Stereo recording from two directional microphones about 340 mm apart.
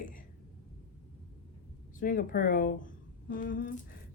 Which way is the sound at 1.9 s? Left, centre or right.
Left.